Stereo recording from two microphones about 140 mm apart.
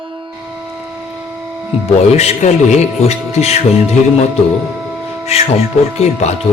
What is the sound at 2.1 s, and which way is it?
Speech, 50° left (ahead or behind).